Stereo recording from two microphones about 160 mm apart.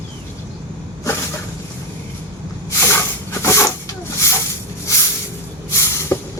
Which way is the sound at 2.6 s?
15° left (ahead or behind).